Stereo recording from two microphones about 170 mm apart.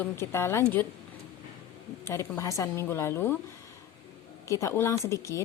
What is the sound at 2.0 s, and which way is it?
Speech, 15° left (ahead or behind).